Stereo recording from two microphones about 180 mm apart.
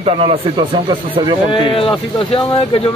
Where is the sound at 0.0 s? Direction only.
35° right (ahead or behind).